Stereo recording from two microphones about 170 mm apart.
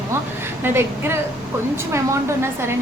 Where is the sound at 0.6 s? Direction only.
15° right (ahead or behind).